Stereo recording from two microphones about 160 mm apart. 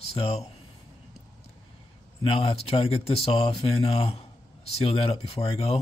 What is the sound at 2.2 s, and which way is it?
Speech, 35° left (ahead or behind).